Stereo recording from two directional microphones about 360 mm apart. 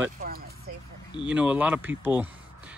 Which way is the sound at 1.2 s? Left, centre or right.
Centre.